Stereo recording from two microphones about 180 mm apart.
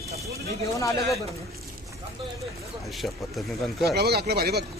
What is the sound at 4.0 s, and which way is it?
Speech, 60° right (ahead or behind).